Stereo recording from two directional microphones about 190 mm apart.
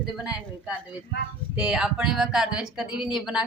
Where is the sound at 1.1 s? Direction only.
60° left (ahead or behind).